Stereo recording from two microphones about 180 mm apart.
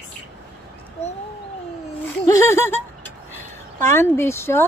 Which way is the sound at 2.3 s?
15° left (ahead or behind).